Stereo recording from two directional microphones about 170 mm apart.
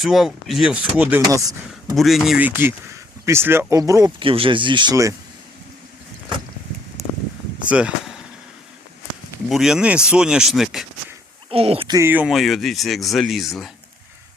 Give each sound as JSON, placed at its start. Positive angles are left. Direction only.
{"t": 0.0, "sound": "speech", "side_deg": 0}
{"t": 1.3, "sound": "speech", "side_deg": -20}
{"t": 2.0, "sound": "speech", "side_deg": 0}
{"t": 2.5, "sound": "speech", "side_deg": -15}
{"t": 4.2, "sound": "speech", "side_deg": -30}
{"t": 7.7, "sound": "speech", "side_deg": -5}
{"t": 9.5, "sound": "speech", "side_deg": 0}
{"t": 11.5, "sound": "speech", "side_deg": -35}
{"t": 11.9, "sound": "speech", "side_deg": -10}
{"t": 12.3, "sound": "speech", "side_deg": 0}